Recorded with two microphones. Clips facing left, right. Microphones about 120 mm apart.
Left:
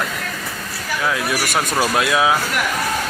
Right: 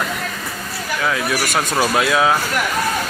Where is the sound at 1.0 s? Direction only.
Centre (ahead or behind).